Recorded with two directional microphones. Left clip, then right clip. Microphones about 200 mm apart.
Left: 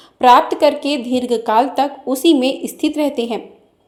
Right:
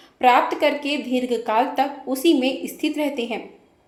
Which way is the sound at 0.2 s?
30° left (ahead or behind).